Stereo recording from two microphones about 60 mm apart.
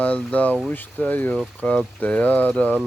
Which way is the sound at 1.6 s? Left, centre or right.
Centre.